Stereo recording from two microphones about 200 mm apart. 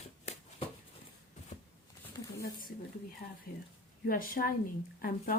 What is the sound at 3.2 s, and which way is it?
Speech, 45° left (ahead or behind).